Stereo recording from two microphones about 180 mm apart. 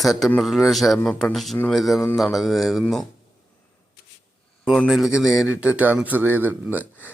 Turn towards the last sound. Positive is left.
turn(degrees=-10)  # may be behind; listen again after turning